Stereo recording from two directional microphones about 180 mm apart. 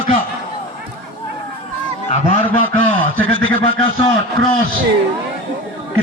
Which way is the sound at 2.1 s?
35° left (ahead or behind).